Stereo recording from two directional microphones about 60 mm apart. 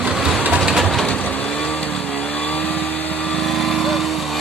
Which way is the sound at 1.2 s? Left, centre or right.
Left.